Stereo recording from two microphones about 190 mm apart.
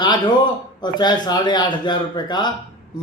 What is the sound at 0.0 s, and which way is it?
A man's voice, 25° left (ahead or behind).